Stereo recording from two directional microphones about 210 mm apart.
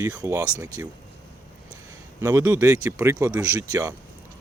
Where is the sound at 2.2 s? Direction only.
10° right (ahead or behind).